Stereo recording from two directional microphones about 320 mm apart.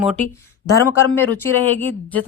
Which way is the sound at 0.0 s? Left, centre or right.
Centre.